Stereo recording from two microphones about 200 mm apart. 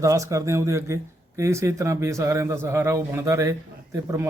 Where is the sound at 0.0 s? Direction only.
15° right (ahead or behind).